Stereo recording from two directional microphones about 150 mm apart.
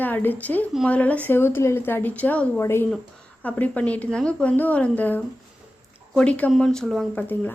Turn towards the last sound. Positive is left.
turn(degrees=15)  # may be behind; listen again after turning